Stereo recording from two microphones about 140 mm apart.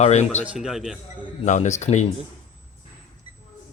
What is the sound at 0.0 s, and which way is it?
Speech, 55° left (ahead or behind).